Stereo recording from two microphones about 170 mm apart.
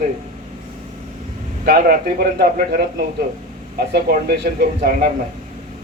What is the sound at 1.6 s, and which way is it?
Speech, 60° right (ahead or behind).